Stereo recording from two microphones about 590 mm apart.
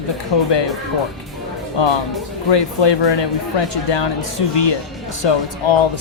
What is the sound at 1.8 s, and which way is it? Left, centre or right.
Speech, left.